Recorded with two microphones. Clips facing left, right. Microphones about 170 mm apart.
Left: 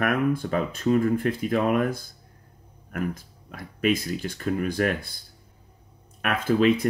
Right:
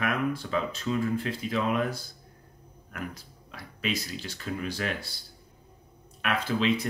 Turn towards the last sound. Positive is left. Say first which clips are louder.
# left 6 dB
turn(degrees=50)  # may be behind; listen again after turning